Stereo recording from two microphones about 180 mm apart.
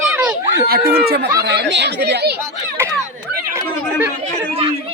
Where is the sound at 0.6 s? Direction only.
60° right (ahead or behind).